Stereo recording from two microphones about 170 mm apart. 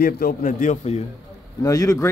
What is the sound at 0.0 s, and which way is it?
A man's voice, 55° left (ahead or behind).